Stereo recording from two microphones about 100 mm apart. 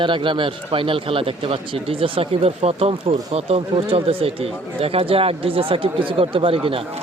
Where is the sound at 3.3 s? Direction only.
90° right.